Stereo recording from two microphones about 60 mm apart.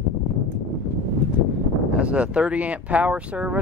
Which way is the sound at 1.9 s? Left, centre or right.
Centre.